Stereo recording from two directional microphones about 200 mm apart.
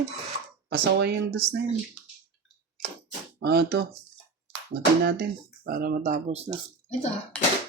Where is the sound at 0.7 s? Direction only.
55° right (ahead or behind).